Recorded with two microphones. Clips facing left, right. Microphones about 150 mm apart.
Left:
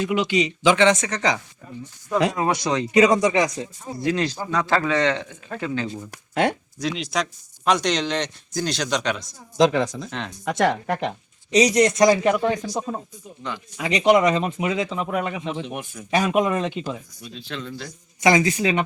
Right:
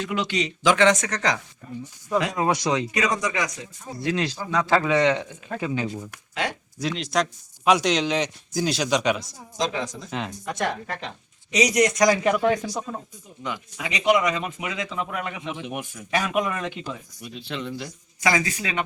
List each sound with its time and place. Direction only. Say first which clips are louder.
0.0 s speech: left 5 dB; 10° left (ahead or behind)
2.4 s a man's voice: even; 10° right (ahead or behind)
2.9 s speech: left 9 dB; 30° left (ahead or behind)
4.0 s a man's voice: left 2 dB; centre (ahead or behind)
6.7 s speech: right 1 dB; centre (ahead or behind)
9.6 s speech: left 9 dB; 65° left (ahead or behind)
10.1 s speech: right 1 dB; 5° right (ahead or behind)
10.4 s speech: left 10 dB; 80° left
11.5 s speech: left 3 dB; 30° left (ahead or behind)
13.8 s speech: left 4 dB; 35° left (ahead or behind)
15.6 s a man's voice: even; 5° right (ahead or behind)
16.0 s speech: left 5 dB; 25° left (ahead or behind)
17.5 s a man's voice: right 1 dB; 15° right (ahead or behind)
18.2 s speech: left 6 dB; 25° left (ahead or behind)